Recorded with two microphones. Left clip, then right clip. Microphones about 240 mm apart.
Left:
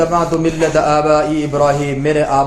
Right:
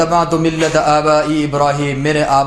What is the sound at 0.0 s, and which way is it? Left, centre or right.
A man's voice, right.